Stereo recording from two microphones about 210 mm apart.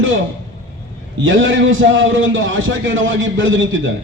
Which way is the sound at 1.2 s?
65° right (ahead or behind).